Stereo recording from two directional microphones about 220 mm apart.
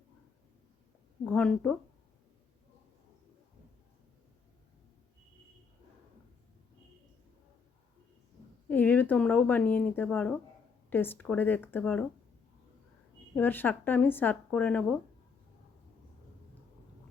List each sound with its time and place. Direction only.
1.2 s speech: 5° left (ahead or behind)
8.7 s speech: 10° left (ahead or behind)
13.3 s speech: 10° left (ahead or behind)